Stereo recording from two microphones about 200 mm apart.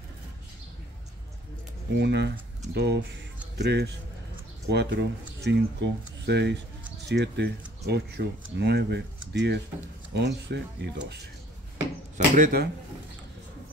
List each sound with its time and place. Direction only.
2.0 s speech: 55° right (ahead or behind)
12.4 s speech: 45° right (ahead or behind)